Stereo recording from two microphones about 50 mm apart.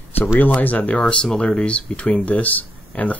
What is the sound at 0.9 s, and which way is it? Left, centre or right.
Speech, centre.